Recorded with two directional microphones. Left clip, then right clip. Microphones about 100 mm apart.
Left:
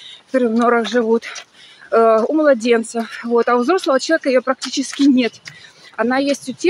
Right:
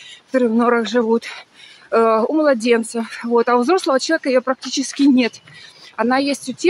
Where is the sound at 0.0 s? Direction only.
15° right (ahead or behind).